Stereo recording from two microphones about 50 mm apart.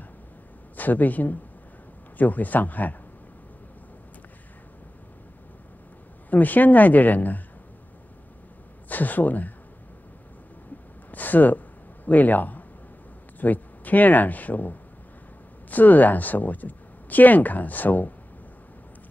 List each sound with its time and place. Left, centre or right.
0.7 s speech: left
6.3 s speech: left
8.8 s speech: left
11.1 s a sound: left
13.4 s speech: left